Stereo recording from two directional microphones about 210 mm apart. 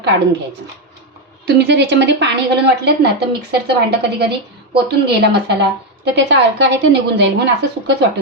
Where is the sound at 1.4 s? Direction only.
55° right (ahead or behind).